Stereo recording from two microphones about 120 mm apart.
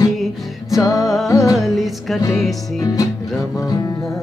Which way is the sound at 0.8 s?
30° left (ahead or behind).